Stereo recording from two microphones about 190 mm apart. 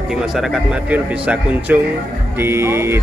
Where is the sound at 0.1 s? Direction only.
Centre (ahead or behind).